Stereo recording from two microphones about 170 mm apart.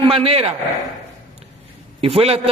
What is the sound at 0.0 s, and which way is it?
Speech, 35° right (ahead or behind).